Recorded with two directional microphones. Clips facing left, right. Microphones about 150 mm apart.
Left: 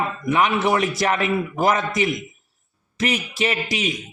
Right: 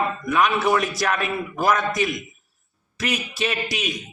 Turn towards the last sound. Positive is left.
turn(degrees=25)  # may be behind; listen again after turning